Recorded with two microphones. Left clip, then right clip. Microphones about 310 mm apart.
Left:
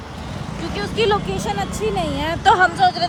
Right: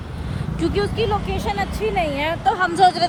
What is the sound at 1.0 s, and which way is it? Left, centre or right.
Speech, left.